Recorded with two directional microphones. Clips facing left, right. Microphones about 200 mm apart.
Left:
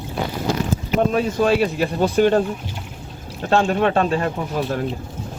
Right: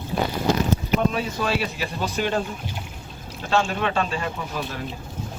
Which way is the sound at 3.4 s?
55° left (ahead or behind).